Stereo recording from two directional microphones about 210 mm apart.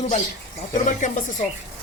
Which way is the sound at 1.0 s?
35° left (ahead or behind).